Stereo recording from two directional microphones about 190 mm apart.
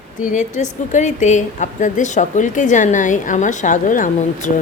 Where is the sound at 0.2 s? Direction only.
40° left (ahead or behind).